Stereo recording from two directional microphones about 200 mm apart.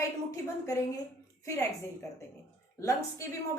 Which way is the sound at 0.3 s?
15° left (ahead or behind).